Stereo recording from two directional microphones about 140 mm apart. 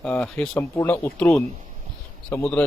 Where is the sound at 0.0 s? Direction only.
10° left (ahead or behind).